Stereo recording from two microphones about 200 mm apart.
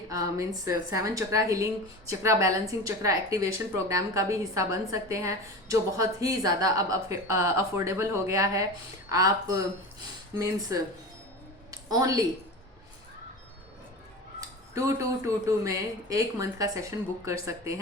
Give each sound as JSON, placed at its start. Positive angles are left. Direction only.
{"t": 0.1, "sound": "a woman's voice", "side_deg": -15}
{"t": 11.7, "sound": "a sound", "side_deg": -15}
{"t": 14.8, "sound": "a woman's voice", "side_deg": -15}